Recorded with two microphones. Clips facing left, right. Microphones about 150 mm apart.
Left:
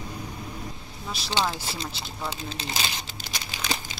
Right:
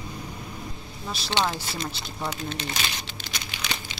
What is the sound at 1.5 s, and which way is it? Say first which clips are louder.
Crumpling: right 2 dB; 35° left (ahead or behind).